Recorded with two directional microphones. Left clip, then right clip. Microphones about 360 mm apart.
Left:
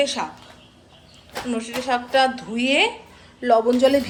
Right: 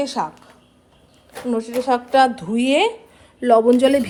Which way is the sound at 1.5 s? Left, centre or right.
Centre.